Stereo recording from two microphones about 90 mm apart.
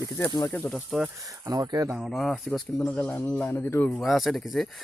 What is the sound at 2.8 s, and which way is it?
Speech, 15° left (ahead or behind).